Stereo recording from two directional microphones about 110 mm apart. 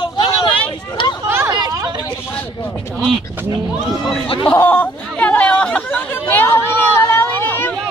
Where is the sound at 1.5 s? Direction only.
35° right (ahead or behind).